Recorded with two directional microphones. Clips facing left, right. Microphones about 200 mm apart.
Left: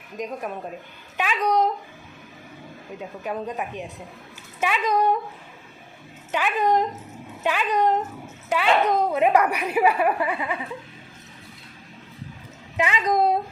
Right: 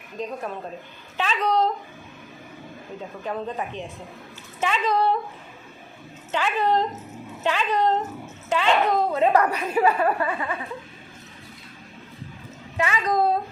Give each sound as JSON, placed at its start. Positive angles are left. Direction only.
{"t": 1.1, "sound": "a woman's voice", "side_deg": 10}
{"t": 3.2, "sound": "a woman's voice", "side_deg": 15}
{"t": 6.3, "sound": "a woman's voice", "side_deg": 15}
{"t": 12.7, "sound": "a woman's voice", "side_deg": 15}